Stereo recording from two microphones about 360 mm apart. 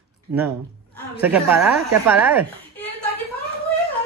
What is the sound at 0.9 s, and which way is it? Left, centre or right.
A woman's voice, centre.